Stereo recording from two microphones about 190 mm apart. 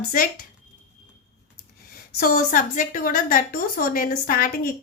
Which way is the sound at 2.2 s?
45° left (ahead or behind).